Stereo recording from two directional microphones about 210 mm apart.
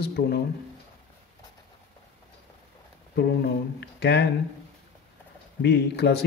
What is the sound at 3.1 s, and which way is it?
Speech, 50° left (ahead or behind).